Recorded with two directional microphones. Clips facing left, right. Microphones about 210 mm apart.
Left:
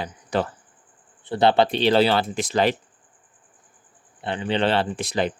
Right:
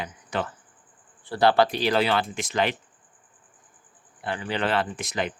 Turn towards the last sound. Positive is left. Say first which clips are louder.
# left 5 dB
turn(degrees=30)  # may be behind; listen again after turning